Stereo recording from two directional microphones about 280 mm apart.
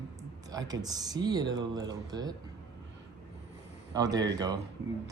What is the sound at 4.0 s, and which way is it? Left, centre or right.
Speech, centre.